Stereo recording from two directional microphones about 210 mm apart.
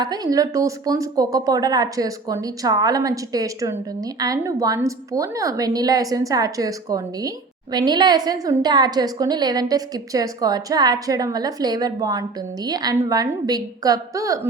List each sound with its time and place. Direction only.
0.0 s a woman's voice: 20° right (ahead or behind)